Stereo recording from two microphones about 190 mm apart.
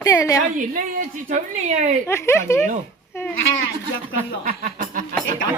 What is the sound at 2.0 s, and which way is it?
Speech, 15° left (ahead or behind).